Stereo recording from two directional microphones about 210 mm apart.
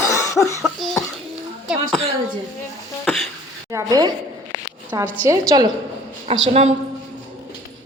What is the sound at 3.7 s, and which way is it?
Speech, 15° right (ahead or behind).